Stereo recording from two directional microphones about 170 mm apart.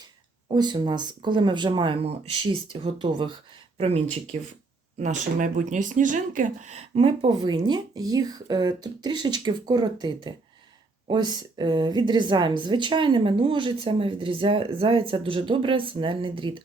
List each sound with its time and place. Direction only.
0.4 s a woman's voice: 25° right (ahead or behind)